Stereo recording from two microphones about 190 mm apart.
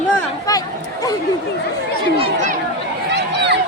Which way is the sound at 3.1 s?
65° right (ahead or behind).